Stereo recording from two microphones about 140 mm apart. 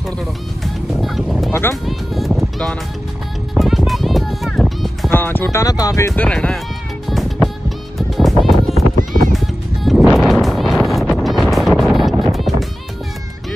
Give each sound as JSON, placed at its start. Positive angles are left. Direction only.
{"t": 1.0, "sound": "boat", "side_deg": 0}
{"t": 1.5, "sound": "music", "side_deg": 20}
{"t": 1.9, "sound": "music", "side_deg": 0}
{"t": 5.1, "sound": "speech", "side_deg": 15}
{"t": 6.1, "sound": "speech", "side_deg": 10}
{"t": 7.1, "sound": "music", "side_deg": 0}
{"t": 9.8, "sound": "music", "side_deg": 0}
{"t": 10.4, "sound": "vehicle", "side_deg": 0}